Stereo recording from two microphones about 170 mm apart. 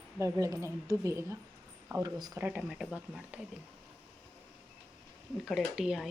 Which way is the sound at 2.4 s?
10° right (ahead or behind).